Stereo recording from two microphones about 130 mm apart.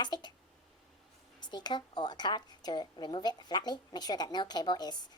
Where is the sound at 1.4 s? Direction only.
35° left (ahead or behind).